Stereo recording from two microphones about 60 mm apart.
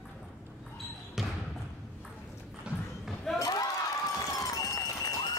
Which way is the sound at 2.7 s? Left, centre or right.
Centre.